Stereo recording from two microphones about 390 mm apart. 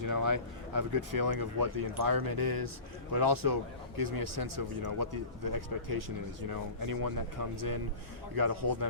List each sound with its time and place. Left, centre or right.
0.0 s a man's voice: right